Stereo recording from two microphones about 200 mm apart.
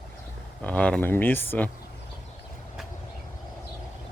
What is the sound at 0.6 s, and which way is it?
Speech, 5° left (ahead or behind).